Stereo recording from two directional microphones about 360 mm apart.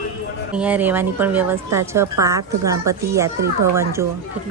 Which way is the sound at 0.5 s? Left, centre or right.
Centre.